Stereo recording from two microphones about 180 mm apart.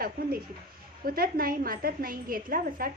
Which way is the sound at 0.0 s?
55° right (ahead or behind).